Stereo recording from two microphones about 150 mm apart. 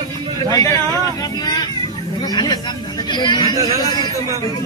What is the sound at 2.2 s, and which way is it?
Speech, 25° left (ahead or behind).